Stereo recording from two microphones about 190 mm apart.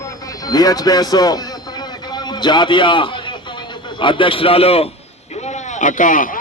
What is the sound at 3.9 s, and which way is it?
Speech, 25° left (ahead or behind).